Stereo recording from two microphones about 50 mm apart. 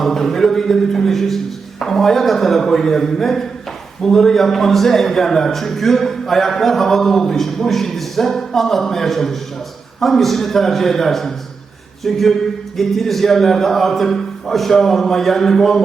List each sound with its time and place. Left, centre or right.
0.0 s a man's voice: centre